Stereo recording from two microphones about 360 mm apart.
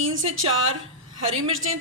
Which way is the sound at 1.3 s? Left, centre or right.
Centre.